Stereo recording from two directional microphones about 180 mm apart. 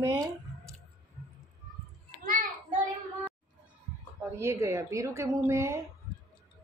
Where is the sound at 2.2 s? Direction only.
50° right (ahead or behind).